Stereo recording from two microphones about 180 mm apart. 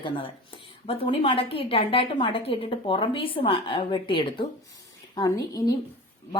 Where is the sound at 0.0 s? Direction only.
30° left (ahead or behind).